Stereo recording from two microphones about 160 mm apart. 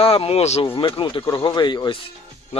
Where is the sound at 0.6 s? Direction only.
30° left (ahead or behind).